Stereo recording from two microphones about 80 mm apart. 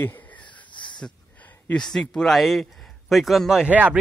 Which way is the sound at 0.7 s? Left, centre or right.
Left.